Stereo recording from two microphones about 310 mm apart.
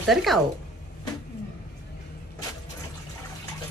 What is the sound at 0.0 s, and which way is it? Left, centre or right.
Speech, centre.